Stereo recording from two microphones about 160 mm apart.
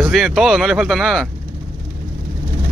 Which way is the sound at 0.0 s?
Centre (ahead or behind).